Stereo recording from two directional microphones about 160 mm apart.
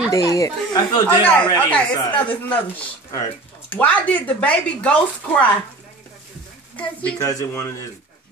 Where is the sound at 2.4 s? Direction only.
10° left (ahead or behind).